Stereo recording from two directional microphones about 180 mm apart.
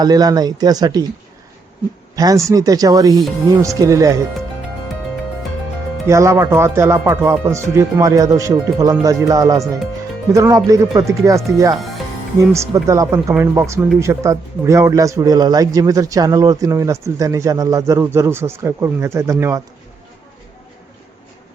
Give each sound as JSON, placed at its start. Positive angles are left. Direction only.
{"t": 0.0, "sound": "speech", "side_deg": -20}
{"t": 2.1, "sound": "speech", "side_deg": -20}
{"t": 6.1, "sound": "speech", "side_deg": -15}
{"t": 12.4, "sound": "speech", "side_deg": -15}